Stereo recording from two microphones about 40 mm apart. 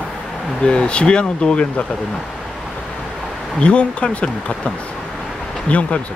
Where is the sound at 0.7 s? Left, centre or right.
Left.